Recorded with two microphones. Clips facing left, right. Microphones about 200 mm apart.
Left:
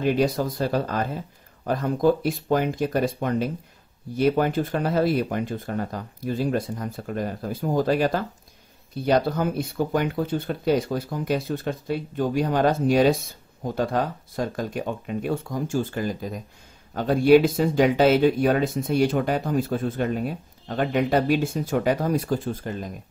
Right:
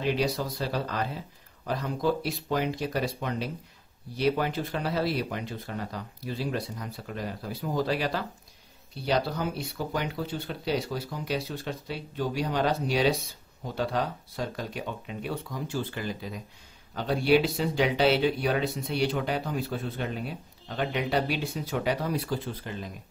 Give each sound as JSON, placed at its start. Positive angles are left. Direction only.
{"t": 0.0, "sound": "speech", "side_deg": 50}